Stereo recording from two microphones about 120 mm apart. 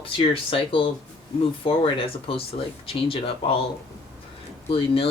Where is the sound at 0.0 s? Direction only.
45° left (ahead or behind).